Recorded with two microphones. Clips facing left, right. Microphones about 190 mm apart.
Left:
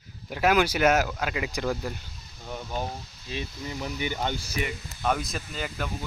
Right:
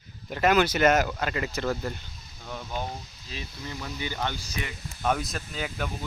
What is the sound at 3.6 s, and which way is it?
Speech, 15° left (ahead or behind).